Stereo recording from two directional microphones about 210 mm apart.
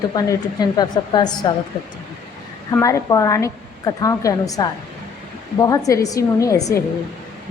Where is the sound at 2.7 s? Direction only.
15° left (ahead or behind).